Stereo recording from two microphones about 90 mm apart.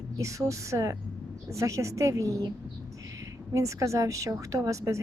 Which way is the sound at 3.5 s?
35° right (ahead or behind).